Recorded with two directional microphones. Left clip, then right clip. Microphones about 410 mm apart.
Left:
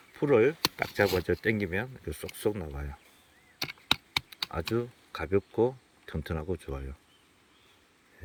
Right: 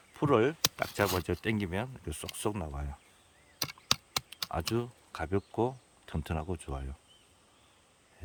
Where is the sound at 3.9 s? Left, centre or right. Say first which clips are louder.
Left 4 dB; centre.